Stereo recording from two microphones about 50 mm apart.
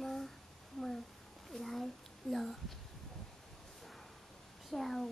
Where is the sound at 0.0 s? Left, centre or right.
Centre.